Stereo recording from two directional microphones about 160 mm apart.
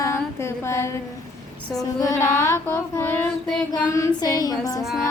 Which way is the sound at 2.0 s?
15° left (ahead or behind).